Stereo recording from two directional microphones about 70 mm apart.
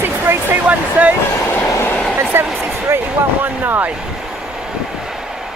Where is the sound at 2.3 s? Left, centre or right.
Right.